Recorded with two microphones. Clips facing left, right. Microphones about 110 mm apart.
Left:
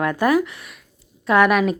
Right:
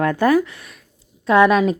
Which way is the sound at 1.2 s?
25° right (ahead or behind).